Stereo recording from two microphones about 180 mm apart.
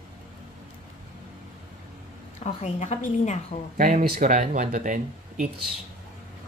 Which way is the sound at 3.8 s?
50° right (ahead or behind).